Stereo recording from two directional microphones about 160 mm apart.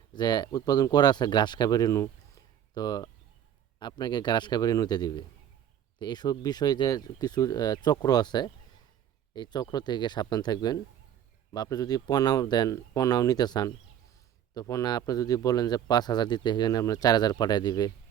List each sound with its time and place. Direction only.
0.1 s a man's voice: 25° left (ahead or behind)